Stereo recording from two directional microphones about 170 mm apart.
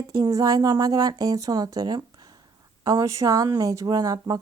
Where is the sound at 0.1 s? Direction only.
20° right (ahead or behind).